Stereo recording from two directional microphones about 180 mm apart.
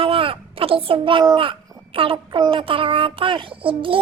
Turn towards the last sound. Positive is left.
turn(degrees=-30)  # may be behind; listen again after turning